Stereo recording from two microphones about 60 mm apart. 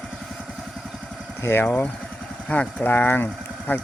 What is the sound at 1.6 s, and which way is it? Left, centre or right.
Speech, left.